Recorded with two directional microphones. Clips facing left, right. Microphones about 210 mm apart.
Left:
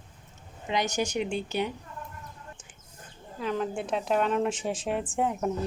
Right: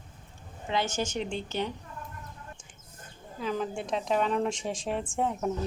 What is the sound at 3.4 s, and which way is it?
A woman's voice, centre (ahead or behind).